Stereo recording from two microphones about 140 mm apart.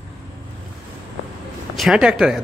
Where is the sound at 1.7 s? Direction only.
Centre (ahead or behind).